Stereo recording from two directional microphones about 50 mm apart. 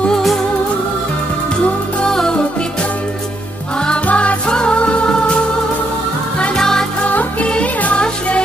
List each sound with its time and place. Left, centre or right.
2.0 s music: centre
3.8 s music: left
6.4 s music: centre
7.0 s music: left